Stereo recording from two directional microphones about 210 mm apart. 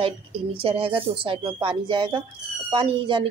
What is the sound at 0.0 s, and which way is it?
A woman's voice, 25° right (ahead or behind).